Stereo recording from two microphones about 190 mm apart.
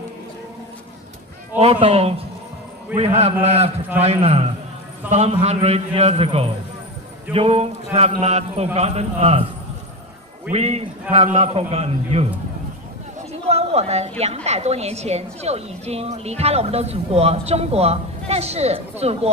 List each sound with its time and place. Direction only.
1.5 s a woman's voice: 30° right (ahead or behind)
10.5 s a woman's voice: 35° right (ahead or behind)
13.5 s a woman's voice: 35° right (ahead or behind)